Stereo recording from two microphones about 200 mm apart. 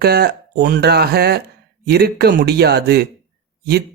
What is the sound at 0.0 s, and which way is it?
Speech, 50° right (ahead or behind).